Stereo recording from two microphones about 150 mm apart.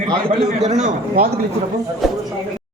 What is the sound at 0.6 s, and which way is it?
Speech, 50° right (ahead or behind).